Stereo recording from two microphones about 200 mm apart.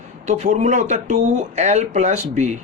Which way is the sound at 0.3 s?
35° right (ahead or behind).